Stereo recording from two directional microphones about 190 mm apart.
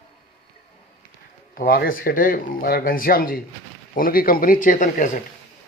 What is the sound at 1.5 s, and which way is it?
Speech, 50° left (ahead or behind).